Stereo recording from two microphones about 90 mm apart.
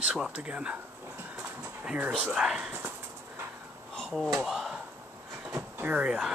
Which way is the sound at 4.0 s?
5° left (ahead or behind).